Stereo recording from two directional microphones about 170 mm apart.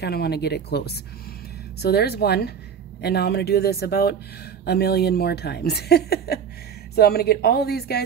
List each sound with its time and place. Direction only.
0.0 s speech: 70° left (ahead or behind)